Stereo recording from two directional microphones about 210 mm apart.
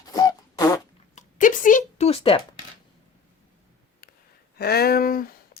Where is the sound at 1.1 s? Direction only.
40° left (ahead or behind).